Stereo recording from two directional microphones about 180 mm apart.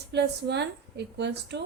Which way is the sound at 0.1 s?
70° right (ahead or behind).